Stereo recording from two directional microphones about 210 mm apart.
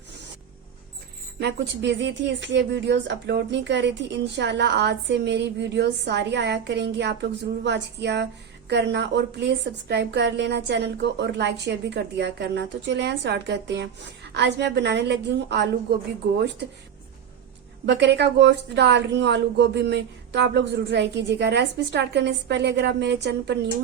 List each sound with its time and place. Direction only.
1.4 s a woman's voice: 55° right (ahead or behind)
17.8 s a woman's voice: 55° right (ahead or behind)